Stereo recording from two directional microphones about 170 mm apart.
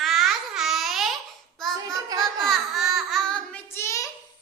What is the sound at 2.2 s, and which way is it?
Child singing, centre (ahead or behind).